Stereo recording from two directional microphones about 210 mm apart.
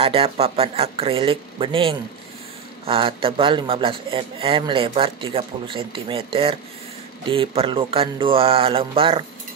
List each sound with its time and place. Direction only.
0.0 s a man's voice: 25° right (ahead or behind)